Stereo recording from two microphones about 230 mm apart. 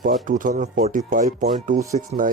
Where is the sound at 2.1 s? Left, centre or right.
Right.